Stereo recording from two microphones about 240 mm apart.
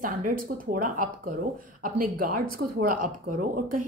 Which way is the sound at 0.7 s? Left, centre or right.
Right.